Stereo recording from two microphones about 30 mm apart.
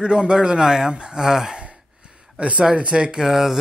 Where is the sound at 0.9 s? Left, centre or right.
Right.